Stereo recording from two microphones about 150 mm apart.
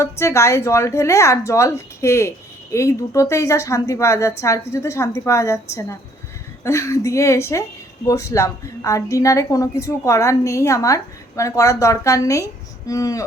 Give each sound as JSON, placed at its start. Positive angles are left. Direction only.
{"t": 0.0, "sound": "a woman's voice", "side_deg": 20}